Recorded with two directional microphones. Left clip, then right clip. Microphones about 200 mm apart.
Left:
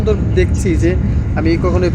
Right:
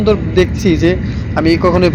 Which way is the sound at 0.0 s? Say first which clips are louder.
Right 4 dB; 5° right (ahead or behind).